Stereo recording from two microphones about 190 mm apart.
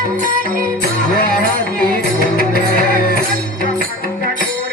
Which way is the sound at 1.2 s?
50° left (ahead or behind).